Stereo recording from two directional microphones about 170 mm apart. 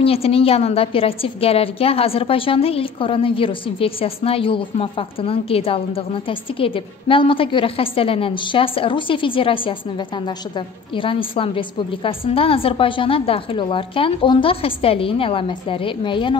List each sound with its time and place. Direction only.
0.0 s a woman's voice: 35° left (ahead or behind)